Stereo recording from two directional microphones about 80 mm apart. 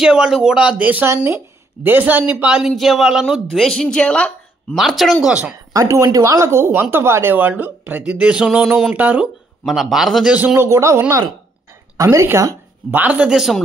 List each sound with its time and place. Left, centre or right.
0.0 s speech: centre
1.0 s a woman's voice: right; by 2.7 s centre
2.7 s speech: centre
3.5 s speech: centre
4.7 s speech: centre
5.2 s speech: centre
5.7 s speech: right
7.3 s a woman's voice: centre
8.9 s a woman's voice: centre
9.7 s speech: centre
10.3 s speech: centre
10.6 s speech: right
12.9 s speech: centre